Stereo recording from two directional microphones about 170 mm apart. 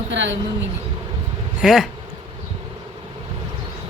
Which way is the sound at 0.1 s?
90° right.